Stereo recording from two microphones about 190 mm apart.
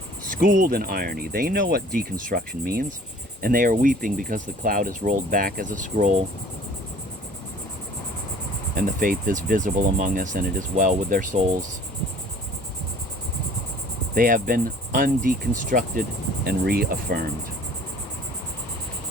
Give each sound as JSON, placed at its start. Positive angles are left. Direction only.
{"t": 0.4, "sound": "speech", "side_deg": -70}
{"t": 0.7, "sound": "speech", "side_deg": -50}
{"t": 3.4, "sound": "speech", "side_deg": -45}
{"t": 8.7, "sound": "speech", "side_deg": -45}
{"t": 14.2, "sound": "speech", "side_deg": -45}